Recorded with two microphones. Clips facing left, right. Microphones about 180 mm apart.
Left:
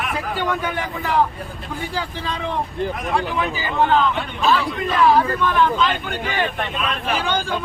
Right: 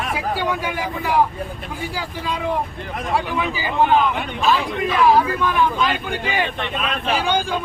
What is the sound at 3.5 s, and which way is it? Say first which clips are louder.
Speech: right 2 dB; 15° right (ahead or behind).